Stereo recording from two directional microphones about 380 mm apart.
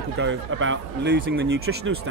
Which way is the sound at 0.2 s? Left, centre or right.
Right.